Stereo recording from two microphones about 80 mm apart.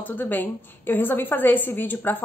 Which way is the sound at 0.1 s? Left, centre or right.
Left.